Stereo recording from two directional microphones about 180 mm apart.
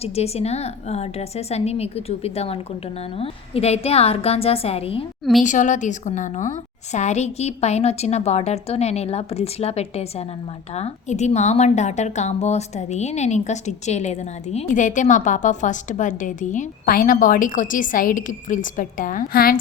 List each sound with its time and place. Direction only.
0.0 s a woman's voice: 35° left (ahead or behind)
5.4 s a woman's voice: 45° left (ahead or behind)